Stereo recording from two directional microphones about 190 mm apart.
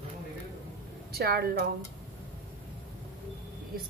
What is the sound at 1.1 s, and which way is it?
Speech, 55° right (ahead or behind).